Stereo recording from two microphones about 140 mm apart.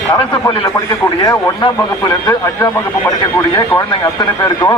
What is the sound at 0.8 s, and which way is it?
Speech, 25° left (ahead or behind).